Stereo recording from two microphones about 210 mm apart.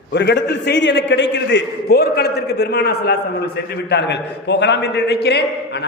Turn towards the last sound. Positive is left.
turn(degrees=55)  # may be behind; listen again after turning